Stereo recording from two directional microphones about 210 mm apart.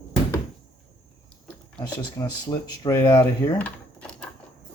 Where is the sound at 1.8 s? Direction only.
20° left (ahead or behind).